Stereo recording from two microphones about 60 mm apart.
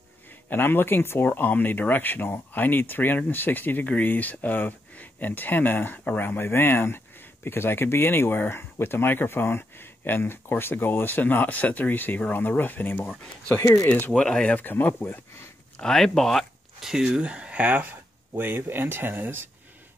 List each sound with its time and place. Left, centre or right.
0.5 s speech: left
14.1 s speech: centre
14.5 s speech: left
15.8 s speech: centre
16.8 s speech: centre
18.3 s speech: right